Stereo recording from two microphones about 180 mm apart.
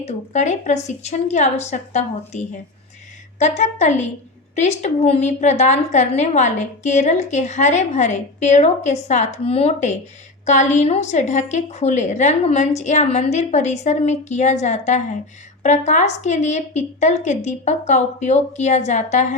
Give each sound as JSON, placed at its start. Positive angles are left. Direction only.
{"t": 0.0, "sound": "a woman's voice", "side_deg": 40}